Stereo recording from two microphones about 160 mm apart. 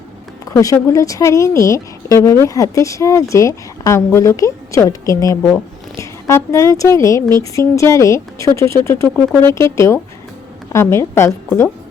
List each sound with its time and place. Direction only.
0.5 s speech: 20° left (ahead or behind)